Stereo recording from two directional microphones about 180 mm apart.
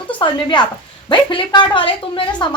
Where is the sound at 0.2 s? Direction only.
25° left (ahead or behind).